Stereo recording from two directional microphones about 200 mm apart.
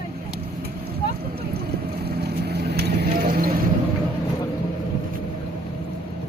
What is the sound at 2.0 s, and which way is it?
Vehicle, 55° right (ahead or behind).